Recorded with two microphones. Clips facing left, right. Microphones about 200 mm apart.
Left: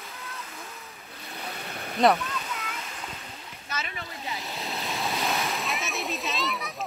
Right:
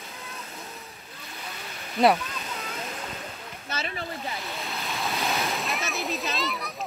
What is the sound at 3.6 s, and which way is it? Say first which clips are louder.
Splash: right 3 dB; 30° right (ahead or behind).